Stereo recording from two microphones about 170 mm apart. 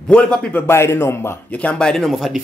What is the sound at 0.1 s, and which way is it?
A man's voice, 5° left (ahead or behind).